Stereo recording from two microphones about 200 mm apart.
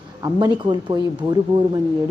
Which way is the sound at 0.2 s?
20° right (ahead or behind).